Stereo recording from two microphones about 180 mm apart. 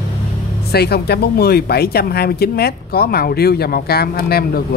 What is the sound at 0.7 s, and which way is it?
Speech, 60° left (ahead or behind).